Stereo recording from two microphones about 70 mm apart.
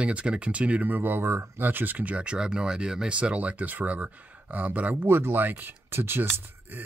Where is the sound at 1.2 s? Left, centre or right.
Right.